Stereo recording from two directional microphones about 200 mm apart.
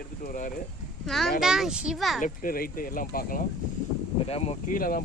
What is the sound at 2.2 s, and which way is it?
Speech, 45° left (ahead or behind).